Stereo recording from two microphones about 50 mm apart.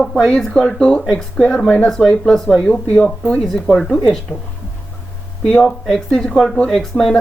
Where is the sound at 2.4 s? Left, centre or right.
Left.